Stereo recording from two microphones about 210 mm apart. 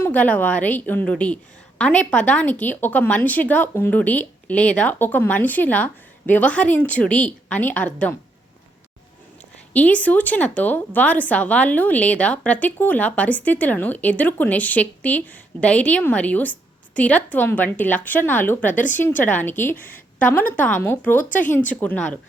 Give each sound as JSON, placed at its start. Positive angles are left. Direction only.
{"t": 0.0, "sound": "a woman's voice", "side_deg": 10}
{"t": 9.7, "sound": "a woman's voice", "side_deg": 5}
{"t": 18.7, "sound": "speech", "side_deg": 40}
{"t": 18.9, "sound": "a woman's voice", "side_deg": 10}